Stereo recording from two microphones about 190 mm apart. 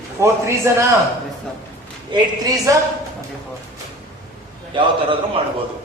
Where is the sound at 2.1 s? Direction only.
20° right (ahead or behind).